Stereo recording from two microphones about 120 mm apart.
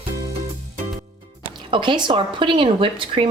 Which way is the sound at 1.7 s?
40° right (ahead or behind).